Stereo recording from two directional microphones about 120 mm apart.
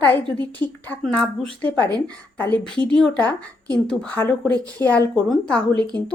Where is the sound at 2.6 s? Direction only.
5° left (ahead or behind); by 4.9 s 20° left (ahead or behind).